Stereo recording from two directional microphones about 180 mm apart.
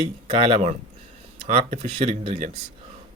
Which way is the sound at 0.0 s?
35° right (ahead or behind).